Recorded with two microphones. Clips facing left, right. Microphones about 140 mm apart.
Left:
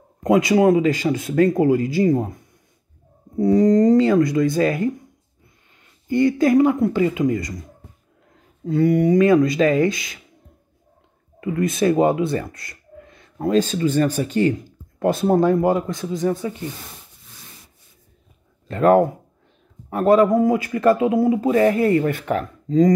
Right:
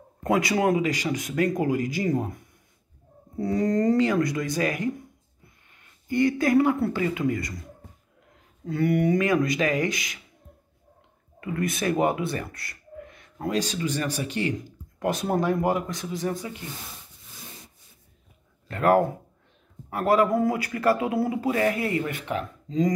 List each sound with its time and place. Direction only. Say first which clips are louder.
0.2 s speech: left 7 dB; 20° left (ahead or behind)
6.0 s speech: left 5 dB; 25° left (ahead or behind)
8.6 s speech: left 6 dB; 25° left (ahead or behind)
11.4 s speech: left 8 dB; 25° left (ahead or behind)
18.7 s speech: left 6 dB; 25° left (ahead or behind); by 22.8 s 45° left (ahead or behind)